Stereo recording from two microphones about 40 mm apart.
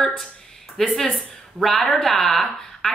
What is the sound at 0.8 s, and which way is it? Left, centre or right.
A woman's voice, centre.